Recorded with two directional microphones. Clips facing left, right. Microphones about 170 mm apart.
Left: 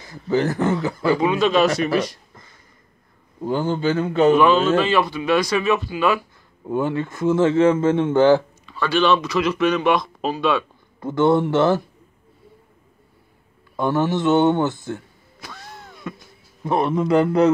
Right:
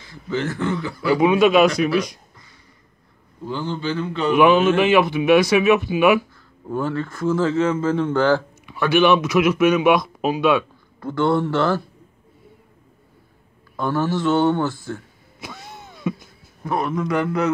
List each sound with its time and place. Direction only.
0.0 s speech: 40° left (ahead or behind)
1.1 s speech: 10° right (ahead or behind)
3.4 s speech: 45° left (ahead or behind)
4.4 s speech: 15° right (ahead or behind)
5.4 s speech: 5° right (ahead or behind)
5.9 s speech: 15° right (ahead or behind)
6.7 s speech: 15° left (ahead or behind)
8.6 s speech: 15° right (ahead or behind)
11.0 s speech: 20° left (ahead or behind)
13.7 s speech: 20° left (ahead or behind)
15.4 s a sound: 15° right (ahead or behind)
16.6 s speech: 25° left (ahead or behind)